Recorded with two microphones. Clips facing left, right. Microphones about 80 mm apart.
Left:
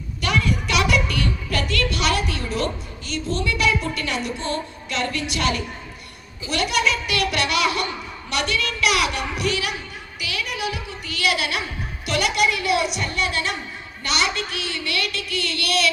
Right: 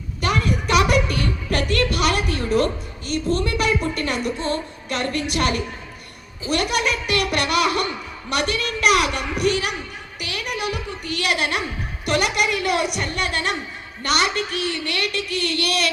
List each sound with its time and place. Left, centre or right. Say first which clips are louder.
0.2 s music: right 1 dB; right
3.1 s a woman's voice: right 3 dB; right
10.2 s music: right 1 dB; right
12.0 s a woman's voice: even; right